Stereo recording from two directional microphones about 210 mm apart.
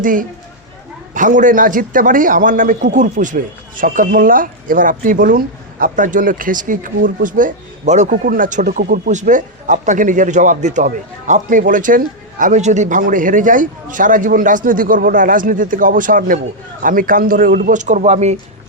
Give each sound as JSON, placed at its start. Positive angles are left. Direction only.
{"t": 0.0, "sound": "speech", "side_deg": -40}